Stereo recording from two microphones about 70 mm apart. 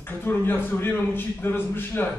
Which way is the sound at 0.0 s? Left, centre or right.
Left.